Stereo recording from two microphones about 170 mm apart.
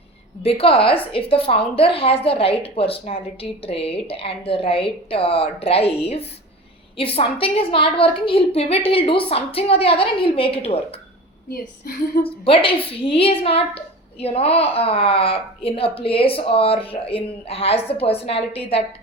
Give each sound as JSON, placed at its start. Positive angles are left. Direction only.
{"t": 0.4, "sound": "a woman's voice", "side_deg": 35}
{"t": 11.4, "sound": "a woman's voice", "side_deg": 65}
{"t": 12.2, "sound": "a woman's voice", "side_deg": 30}